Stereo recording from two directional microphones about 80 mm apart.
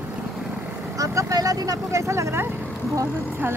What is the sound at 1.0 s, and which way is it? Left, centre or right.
Speech, right.